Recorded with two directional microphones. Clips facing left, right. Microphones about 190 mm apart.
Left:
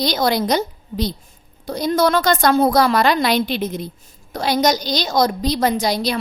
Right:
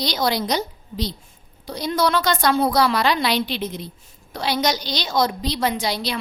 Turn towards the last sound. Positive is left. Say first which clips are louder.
# left 5 dB
turn(degrees=45)  # may be behind; listen again after turning